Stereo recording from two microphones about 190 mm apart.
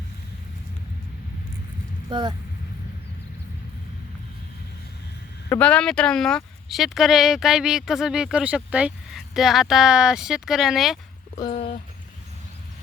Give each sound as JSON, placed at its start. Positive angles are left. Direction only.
{"t": 2.0, "sound": "speech", "side_deg": -25}
{"t": 5.5, "sound": "speech", "side_deg": 5}
{"t": 11.5, "sound": "speech", "side_deg": 30}